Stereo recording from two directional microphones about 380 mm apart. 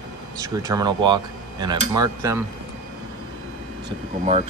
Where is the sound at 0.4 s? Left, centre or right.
Centre.